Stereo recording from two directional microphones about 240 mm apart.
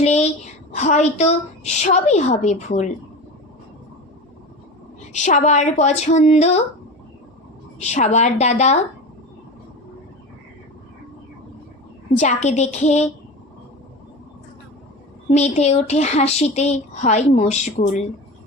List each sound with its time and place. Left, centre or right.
0.0 s a woman's voice: left
5.1 s a woman's voice: left
7.8 s a woman's voice: left
12.1 s a woman's voice: left
15.3 s a woman's voice: left